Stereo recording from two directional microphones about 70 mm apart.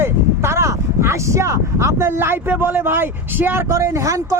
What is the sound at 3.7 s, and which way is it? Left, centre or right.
Speech, right.